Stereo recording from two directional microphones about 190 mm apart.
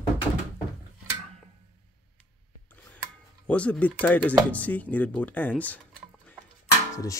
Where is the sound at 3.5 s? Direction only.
5° left (ahead or behind).